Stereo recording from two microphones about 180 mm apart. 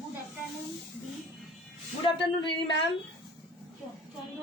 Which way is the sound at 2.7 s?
90° left.